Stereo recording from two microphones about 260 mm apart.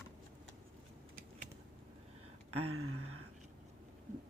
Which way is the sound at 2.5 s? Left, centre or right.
Right.